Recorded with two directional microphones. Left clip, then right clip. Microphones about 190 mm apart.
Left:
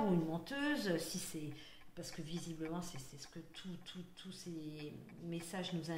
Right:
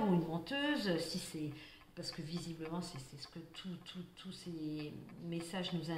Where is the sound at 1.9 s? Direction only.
30° left (ahead or behind).